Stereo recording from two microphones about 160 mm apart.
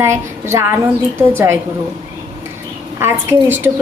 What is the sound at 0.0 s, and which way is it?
A woman's voice, 15° right (ahead or behind).